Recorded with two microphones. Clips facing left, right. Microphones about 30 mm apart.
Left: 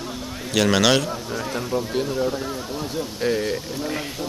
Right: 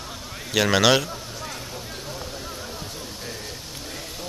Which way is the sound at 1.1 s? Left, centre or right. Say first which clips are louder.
Left 7 dB; left.